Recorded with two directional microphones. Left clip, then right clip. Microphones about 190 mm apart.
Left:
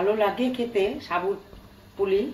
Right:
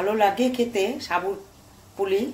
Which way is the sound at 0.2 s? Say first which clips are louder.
Right 4 dB; 40° right (ahead or behind).